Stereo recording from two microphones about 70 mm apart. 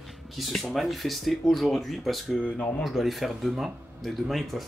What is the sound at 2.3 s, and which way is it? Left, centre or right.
Speech, centre.